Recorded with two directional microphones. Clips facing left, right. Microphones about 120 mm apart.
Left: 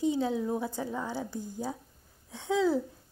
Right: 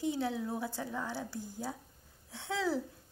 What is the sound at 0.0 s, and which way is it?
A woman's voice, 20° left (ahead or behind).